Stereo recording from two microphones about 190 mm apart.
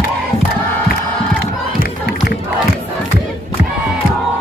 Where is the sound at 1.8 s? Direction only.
60° left (ahead or behind).